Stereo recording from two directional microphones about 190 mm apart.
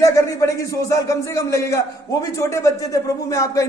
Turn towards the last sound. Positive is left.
turn(degrees=15)  # may be behind; listen again after turning